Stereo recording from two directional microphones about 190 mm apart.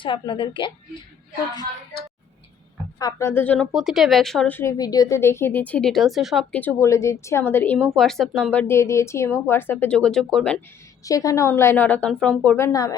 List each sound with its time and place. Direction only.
0.0 s a woman's voice: 25° left (ahead or behind)
3.0 s a woman's voice: 15° left (ahead or behind)
11.0 s a woman's voice: 15° left (ahead or behind)